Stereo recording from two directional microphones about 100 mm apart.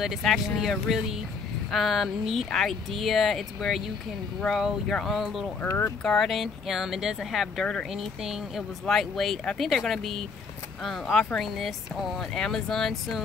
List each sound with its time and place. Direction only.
0.0 s speech: centre (ahead or behind)